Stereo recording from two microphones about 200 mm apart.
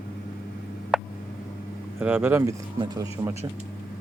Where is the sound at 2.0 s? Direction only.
10° right (ahead or behind).